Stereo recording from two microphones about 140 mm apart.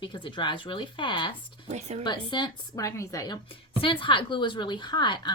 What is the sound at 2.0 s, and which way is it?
A woman's voice, 30° left (ahead or behind).